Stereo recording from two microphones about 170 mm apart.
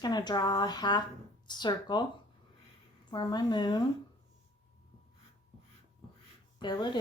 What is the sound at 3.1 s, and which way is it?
Speech, 25° left (ahead or behind).